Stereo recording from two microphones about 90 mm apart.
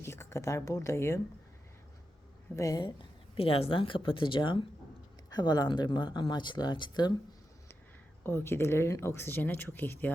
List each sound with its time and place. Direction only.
0.0 s a woman's voice: 30° left (ahead or behind)
2.6 s a woman's voice: 40° left (ahead or behind)
2.8 s speech: 80° left
5.3 s speech: 50° left (ahead or behind)
8.2 s speech: 25° left (ahead or behind)